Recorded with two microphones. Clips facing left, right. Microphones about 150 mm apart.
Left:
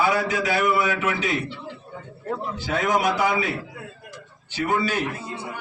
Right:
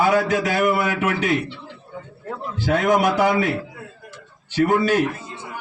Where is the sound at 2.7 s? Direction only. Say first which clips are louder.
Right 4 dB; 55° right (ahead or behind).